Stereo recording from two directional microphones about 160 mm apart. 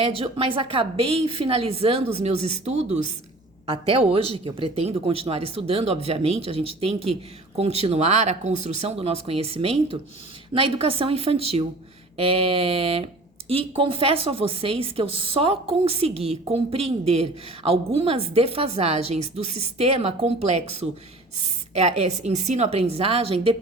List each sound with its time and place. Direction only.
0.0 s a woman's voice: 35° right (ahead or behind)